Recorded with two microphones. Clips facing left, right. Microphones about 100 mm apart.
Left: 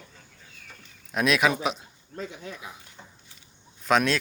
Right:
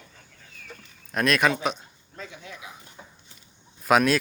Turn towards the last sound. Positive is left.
turn(degrees=-5)  # may be behind; listen again after turning